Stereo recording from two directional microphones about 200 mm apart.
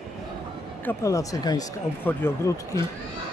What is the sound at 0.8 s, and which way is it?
Speech, 15° left (ahead or behind).